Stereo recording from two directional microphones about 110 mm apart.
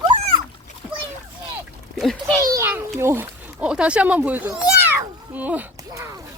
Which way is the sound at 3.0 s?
25° right (ahead or behind).